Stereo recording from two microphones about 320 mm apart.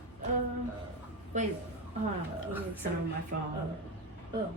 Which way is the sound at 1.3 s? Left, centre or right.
Right.